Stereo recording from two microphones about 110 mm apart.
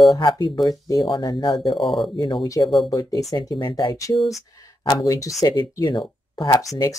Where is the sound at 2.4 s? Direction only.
30° left (ahead or behind).